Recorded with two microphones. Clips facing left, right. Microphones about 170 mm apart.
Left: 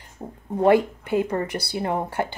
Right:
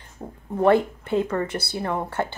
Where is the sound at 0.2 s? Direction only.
15° left (ahead or behind).